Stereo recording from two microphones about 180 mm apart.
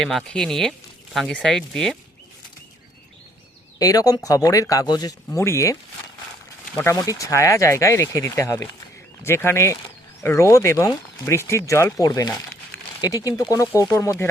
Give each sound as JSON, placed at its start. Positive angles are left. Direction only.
{"t": 0.0, "sound": "speech", "side_deg": 0}
{"t": 3.8, "sound": "speech", "side_deg": 20}
{"t": 6.7, "sound": "speech", "side_deg": 20}